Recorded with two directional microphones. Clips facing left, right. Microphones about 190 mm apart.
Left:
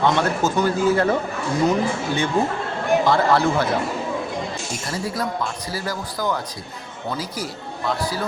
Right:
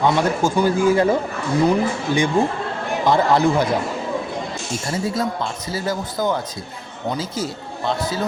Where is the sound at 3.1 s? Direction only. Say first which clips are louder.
Right 6 dB; 20° right (ahead or behind).